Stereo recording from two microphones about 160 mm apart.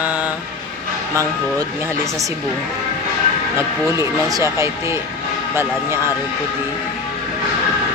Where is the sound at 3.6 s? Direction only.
20° right (ahead or behind).